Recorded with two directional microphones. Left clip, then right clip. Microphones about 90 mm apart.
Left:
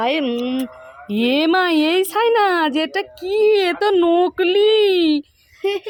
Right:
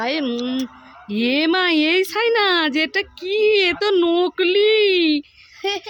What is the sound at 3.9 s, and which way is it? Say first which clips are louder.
Speech: left 2 dB; 5° right (ahead or behind).